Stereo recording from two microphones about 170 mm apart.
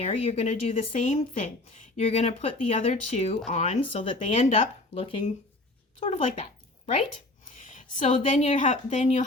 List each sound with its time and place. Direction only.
0.0 s speech: 35° left (ahead or behind)
4.2 s speech: 50° left (ahead or behind)
4.9 s speech: 30° left (ahead or behind)
7.5 s a woman's voice: 50° left (ahead or behind)